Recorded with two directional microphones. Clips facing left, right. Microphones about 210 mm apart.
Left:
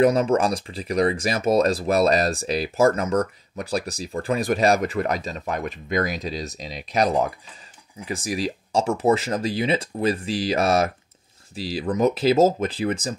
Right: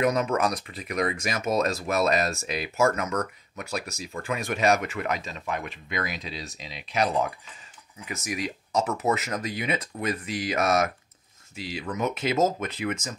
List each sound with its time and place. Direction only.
0.0 s speech: 30° left (ahead or behind)